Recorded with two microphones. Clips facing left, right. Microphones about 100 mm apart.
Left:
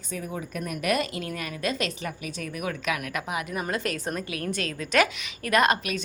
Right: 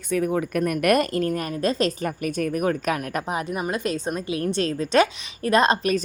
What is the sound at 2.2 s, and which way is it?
Speech, 50° right (ahead or behind).